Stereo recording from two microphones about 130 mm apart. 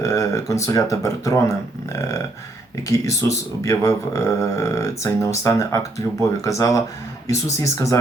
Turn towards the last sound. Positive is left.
turn(degrees=25)  # may be behind; listen again after turning